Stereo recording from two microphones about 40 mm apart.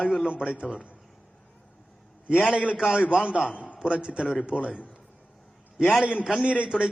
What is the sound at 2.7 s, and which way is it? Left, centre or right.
A man's voice, centre.